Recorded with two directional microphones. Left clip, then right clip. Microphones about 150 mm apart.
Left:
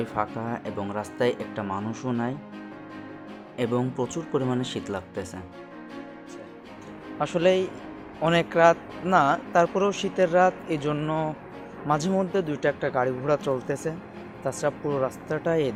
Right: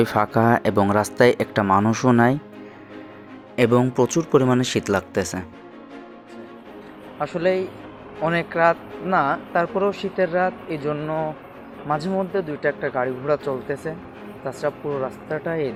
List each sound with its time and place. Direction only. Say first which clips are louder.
0.0 s speech: right 10 dB; 55° right (ahead or behind)
3.5 s speech: right 9 dB; 35° right (ahead or behind)
7.2 s speech: right 1 dB; 25° left (ahead or behind)